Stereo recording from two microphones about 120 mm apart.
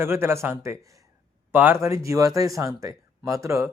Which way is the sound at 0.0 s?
20° right (ahead or behind).